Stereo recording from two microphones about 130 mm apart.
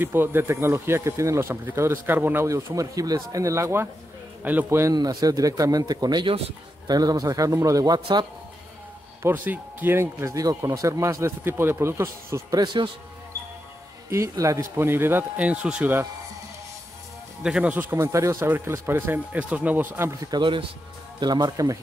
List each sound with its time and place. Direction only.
0.0 s speech: 15° right (ahead or behind); by 8.3 s 30° right (ahead or behind)
9.2 s speech: 15° right (ahead or behind); by 12.9 s 35° right (ahead or behind)
14.1 s speech: 25° right (ahead or behind)
17.4 s speech: 5° right (ahead or behind)
20.2 s speech: 35° right (ahead or behind)